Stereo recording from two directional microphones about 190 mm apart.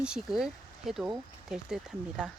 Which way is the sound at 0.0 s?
5° right (ahead or behind).